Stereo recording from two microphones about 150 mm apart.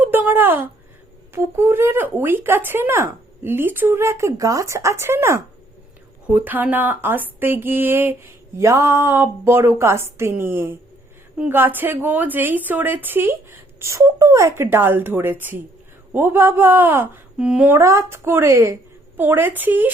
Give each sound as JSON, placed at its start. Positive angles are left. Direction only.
{"t": 0.0, "sound": "a woman's voice", "side_deg": -10}
{"t": 17.7, "sound": "a woman's voice", "side_deg": -20}